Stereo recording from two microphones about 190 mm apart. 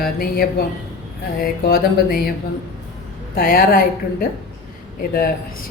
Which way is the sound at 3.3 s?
50° left (ahead or behind).